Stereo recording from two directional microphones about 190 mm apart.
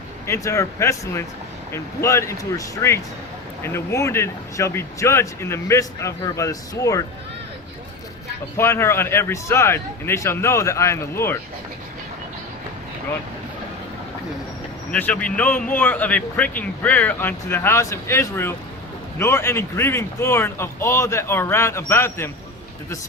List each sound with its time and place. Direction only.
0.3 s speech: 15° left (ahead or behind)
8.5 s speech: 15° left (ahead or behind)
14.9 s speech: 10° left (ahead or behind)